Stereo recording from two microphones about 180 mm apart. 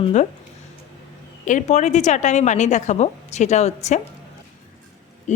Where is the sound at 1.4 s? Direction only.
45° left (ahead or behind).